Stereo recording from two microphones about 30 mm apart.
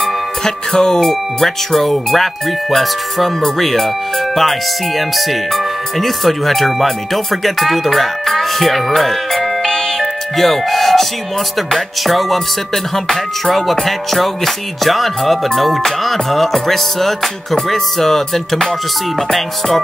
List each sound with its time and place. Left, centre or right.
0.0 s music: left
1.0 s speech: centre
3.3 s music: centre
4.4 s speech: centre
9.7 s music: centre
10.3 s speech: centre
17.6 s music: centre